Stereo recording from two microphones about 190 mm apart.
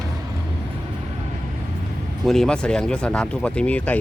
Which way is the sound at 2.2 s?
Centre (ahead or behind).